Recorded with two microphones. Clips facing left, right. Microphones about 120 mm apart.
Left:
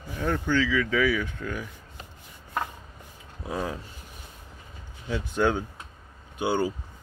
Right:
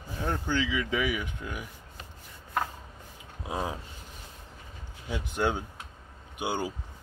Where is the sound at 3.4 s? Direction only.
20° right (ahead or behind).